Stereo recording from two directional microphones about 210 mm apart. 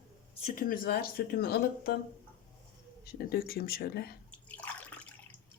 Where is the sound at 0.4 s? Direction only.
40° left (ahead or behind).